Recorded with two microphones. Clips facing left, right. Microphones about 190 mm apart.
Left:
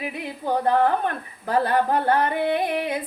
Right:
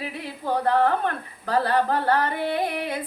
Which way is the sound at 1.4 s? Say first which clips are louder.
Left 1 dB; 20° left (ahead or behind).